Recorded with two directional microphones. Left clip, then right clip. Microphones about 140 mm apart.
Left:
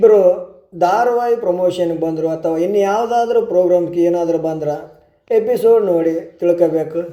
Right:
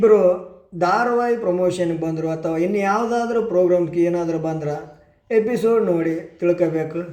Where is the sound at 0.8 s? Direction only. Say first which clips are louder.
Left 4 dB; 20° left (ahead or behind).